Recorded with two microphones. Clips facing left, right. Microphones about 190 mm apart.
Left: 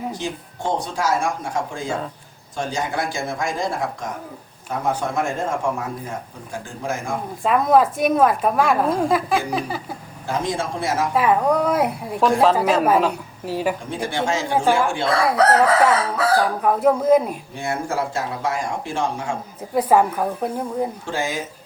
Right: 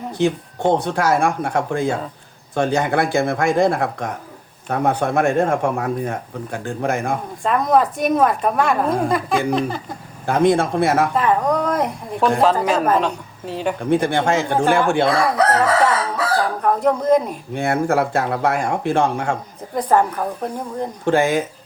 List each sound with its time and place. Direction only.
0.1 s speech: 60° right (ahead or behind)
7.4 s a woman's voice: centre (ahead or behind)
10.2 s speech: 60° right (ahead or behind)
11.1 s a woman's voice: 5° left (ahead or behind)
13.9 s speech: 55° right (ahead or behind)
16.6 s a woman's voice: 5° left (ahead or behind)
17.5 s speech: 60° right (ahead or behind)
19.7 s a woman's voice: 5° left (ahead or behind)
21.0 s speech: 60° right (ahead or behind)